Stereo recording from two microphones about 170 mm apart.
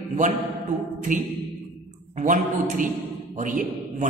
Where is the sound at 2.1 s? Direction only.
45° right (ahead or behind).